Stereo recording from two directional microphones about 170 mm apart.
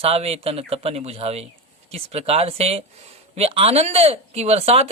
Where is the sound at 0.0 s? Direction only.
35° right (ahead or behind).